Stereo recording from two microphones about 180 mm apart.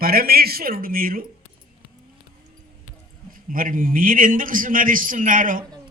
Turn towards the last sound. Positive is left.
turn(degrees=-50)  # may be behind; listen again after turning